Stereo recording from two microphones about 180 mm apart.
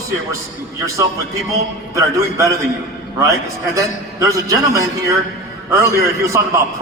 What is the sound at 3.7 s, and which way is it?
A man's voice, 20° right (ahead or behind).